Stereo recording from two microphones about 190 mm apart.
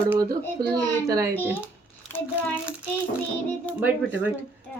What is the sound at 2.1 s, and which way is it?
Speech, 10° left (ahead or behind).